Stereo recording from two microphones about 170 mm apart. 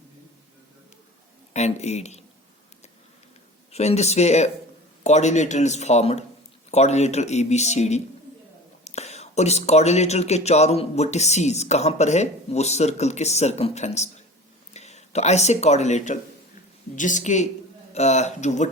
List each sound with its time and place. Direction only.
1.5 s speech: 40° left (ahead or behind)
3.7 s speech: 40° left (ahead or behind)